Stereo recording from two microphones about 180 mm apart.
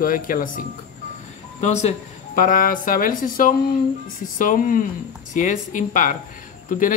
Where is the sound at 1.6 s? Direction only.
40° left (ahead or behind).